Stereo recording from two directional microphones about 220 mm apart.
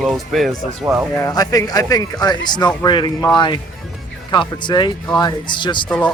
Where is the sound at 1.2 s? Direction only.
15° left (ahead or behind).